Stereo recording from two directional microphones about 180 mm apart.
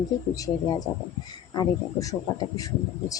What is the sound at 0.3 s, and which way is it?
Speech, 20° left (ahead or behind).